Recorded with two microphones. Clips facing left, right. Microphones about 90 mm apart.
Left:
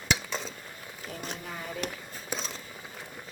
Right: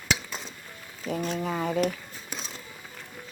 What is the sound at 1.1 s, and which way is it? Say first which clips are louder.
Speech: right 12 dB; 90° right.